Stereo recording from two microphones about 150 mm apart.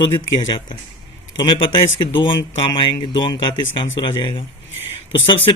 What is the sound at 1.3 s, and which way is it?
A man's voice, 30° left (ahead or behind).